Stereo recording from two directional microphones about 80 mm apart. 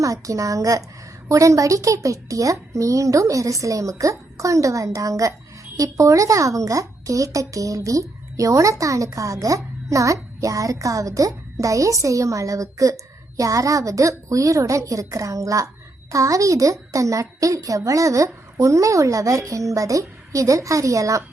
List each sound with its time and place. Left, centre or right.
0.0 s a woman's voice: right